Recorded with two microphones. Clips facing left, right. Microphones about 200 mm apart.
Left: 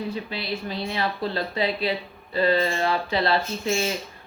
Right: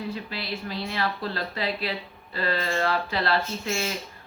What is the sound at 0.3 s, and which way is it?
Speech, 20° left (ahead or behind).